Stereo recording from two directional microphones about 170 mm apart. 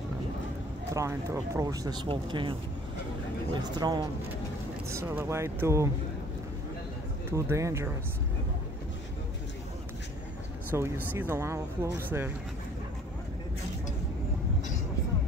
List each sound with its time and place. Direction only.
0.9 s speech: 15° right (ahead or behind)
3.5 s speech: 25° right (ahead or behind)
4.8 s speech: 15° right (ahead or behind)
7.2 s speech: 15° right (ahead or behind)
10.7 s speech: 15° right (ahead or behind)